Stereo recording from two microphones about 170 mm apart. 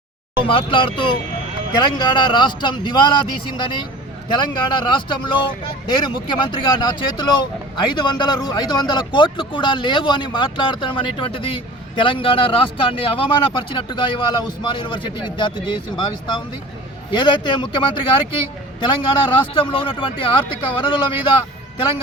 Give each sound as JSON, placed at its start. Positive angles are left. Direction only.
{"t": 0.3, "sound": "a man's voice", "side_deg": 30}
{"t": 4.4, "sound": "a man's voice", "side_deg": 25}